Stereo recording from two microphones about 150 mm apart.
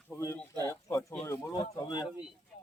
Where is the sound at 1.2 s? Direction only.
25° left (ahead or behind).